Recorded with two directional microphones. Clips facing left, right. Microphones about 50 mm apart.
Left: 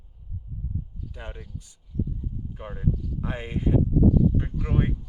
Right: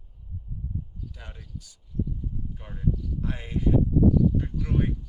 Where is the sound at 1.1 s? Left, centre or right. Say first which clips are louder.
Left 4 dB; left.